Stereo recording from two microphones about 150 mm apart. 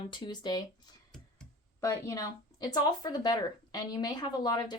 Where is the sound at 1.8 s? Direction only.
20° left (ahead or behind).